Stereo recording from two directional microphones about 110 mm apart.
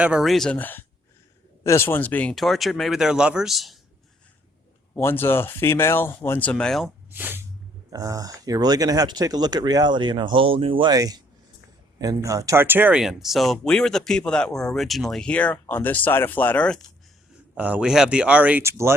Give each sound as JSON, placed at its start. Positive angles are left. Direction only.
{"t": 0.0, "sound": "speech", "side_deg": -5}
{"t": 0.6, "sound": "speech", "side_deg": 15}
{"t": 2.3, "sound": "speech", "side_deg": 0}
{"t": 4.9, "sound": "speech", "side_deg": 20}
{"t": 7.1, "sound": "speech", "side_deg": -20}
{"t": 7.9, "sound": "speech", "side_deg": -30}
{"t": 10.9, "sound": "speech", "side_deg": -35}
{"t": 12.6, "sound": "speech", "side_deg": -15}
{"t": 13.0, "sound": "speech", "side_deg": -5}
{"t": 17.5, "sound": "speech", "side_deg": -10}
{"t": 18.6, "sound": "speech", "side_deg": -25}